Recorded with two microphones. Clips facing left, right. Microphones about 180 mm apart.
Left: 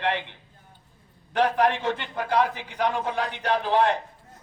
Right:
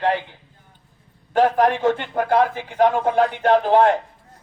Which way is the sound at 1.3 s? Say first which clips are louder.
Right 5 dB; 45° right (ahead or behind).